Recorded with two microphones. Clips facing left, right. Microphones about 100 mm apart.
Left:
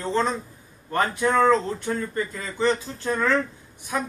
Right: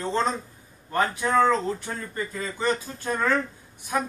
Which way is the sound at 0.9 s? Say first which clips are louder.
Left 2 dB; 5° right (ahead or behind).